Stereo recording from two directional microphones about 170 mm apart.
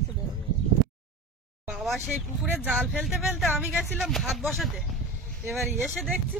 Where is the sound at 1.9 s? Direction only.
5° right (ahead or behind).